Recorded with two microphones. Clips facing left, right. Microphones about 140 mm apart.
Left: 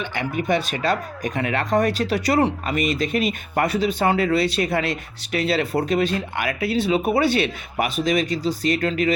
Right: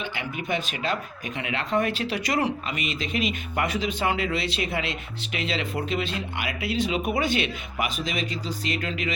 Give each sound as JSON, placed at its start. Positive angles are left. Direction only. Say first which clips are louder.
{"t": 0.5, "sound": "speech", "louder": "left 5 dB", "side_deg": 40}